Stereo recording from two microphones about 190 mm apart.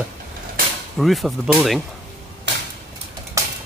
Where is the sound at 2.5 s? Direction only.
65° right (ahead or behind).